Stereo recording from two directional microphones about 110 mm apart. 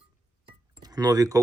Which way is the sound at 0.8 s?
35° right (ahead or behind).